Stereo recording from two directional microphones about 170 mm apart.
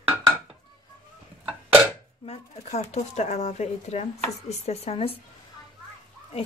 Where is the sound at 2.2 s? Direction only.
40° left (ahead or behind).